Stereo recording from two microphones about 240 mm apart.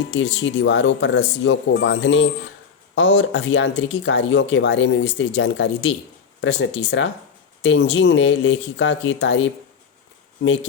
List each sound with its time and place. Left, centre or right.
0.1 s speech: left